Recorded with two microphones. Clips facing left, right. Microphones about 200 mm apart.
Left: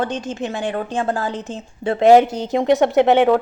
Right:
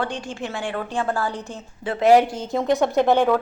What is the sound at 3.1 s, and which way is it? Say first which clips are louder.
Speech: left 4 dB; 20° left (ahead or behind).